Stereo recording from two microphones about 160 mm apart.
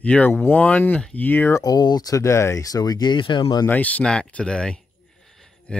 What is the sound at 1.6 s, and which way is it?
Speech, 25° left (ahead or behind).